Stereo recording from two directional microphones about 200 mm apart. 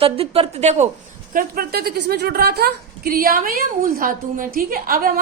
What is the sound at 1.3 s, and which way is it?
A woman's voice, 45° right (ahead or behind).